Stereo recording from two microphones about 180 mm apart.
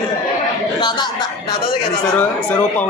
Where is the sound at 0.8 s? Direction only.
25° left (ahead or behind).